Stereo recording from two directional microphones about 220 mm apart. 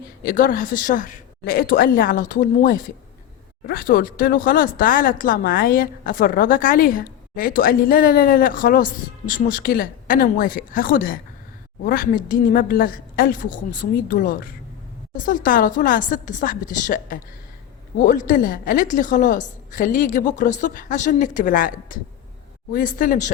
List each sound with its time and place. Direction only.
0.2 s speech: 40° left (ahead or behind)